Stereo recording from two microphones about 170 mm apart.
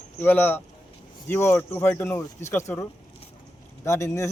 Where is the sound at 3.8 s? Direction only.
15° left (ahead or behind).